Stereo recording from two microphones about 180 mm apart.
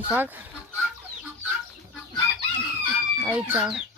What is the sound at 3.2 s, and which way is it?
Speech, 10° right (ahead or behind).